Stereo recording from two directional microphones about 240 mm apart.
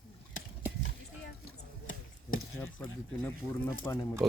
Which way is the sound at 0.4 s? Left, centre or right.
Left.